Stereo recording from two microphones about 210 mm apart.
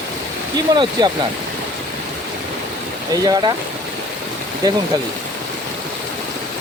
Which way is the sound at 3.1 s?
20° right (ahead or behind).